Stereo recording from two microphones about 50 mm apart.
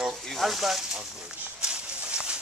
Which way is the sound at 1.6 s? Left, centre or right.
Centre.